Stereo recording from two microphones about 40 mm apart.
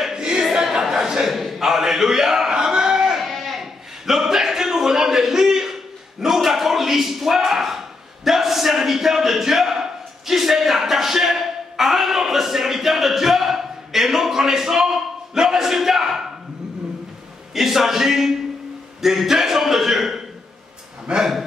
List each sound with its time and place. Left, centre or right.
0.1 s a sound: centre
3.2 s sheep: centre
4.0 s a sound: centre
6.2 s speech: centre
17.6 s a man's voice: centre
21.1 s speech: right